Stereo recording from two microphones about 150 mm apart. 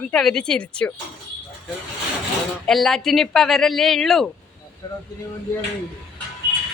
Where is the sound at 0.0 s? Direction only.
5° left (ahead or behind).